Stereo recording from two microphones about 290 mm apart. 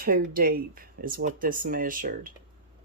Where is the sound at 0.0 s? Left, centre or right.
Right.